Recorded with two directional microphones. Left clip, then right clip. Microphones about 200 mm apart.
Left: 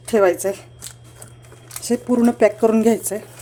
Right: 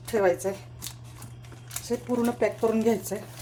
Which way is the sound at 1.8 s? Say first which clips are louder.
Left 9 dB; 60° left (ahead or behind).